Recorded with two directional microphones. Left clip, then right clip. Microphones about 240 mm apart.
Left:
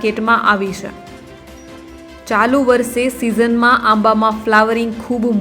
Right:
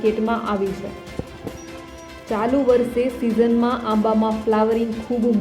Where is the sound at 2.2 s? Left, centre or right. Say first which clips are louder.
Left 6 dB; centre.